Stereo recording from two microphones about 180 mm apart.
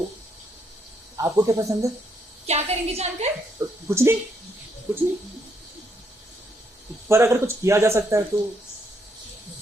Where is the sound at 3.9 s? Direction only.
15° right (ahead or behind).